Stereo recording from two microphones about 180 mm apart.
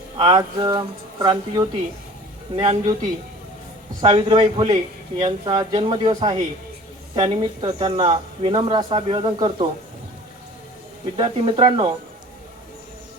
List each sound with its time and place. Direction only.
0.2 s speech: 30° right (ahead or behind)
4.0 s speech: 30° right (ahead or behind)
11.2 s speech: 30° right (ahead or behind)